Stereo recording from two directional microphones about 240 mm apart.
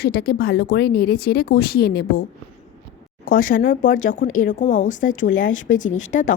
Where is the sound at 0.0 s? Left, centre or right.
Left.